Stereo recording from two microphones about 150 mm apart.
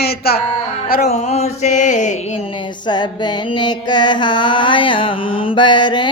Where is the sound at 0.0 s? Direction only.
90° left.